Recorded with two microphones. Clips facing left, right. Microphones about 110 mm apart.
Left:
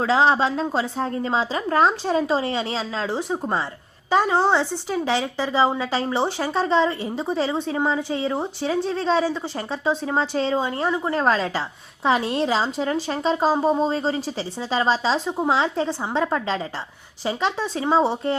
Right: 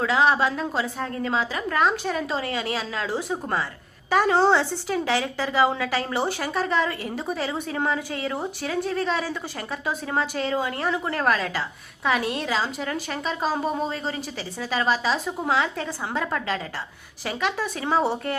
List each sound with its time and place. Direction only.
0.0 s a woman's voice: 30° left (ahead or behind)